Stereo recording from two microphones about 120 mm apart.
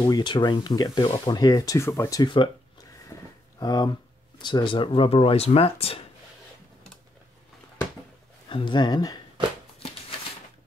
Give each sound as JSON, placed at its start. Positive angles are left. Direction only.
{"t": 0.0, "sound": "speech", "side_deg": 35}
{"t": 3.1, "sound": "a sound", "side_deg": 35}
{"t": 4.4, "sound": "speech", "side_deg": 40}
{"t": 8.5, "sound": "speech", "side_deg": 45}